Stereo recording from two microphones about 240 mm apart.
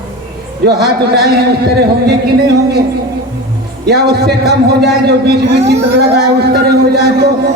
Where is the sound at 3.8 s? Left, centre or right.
Right.